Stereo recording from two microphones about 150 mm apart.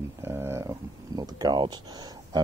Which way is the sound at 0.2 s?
15° right (ahead or behind).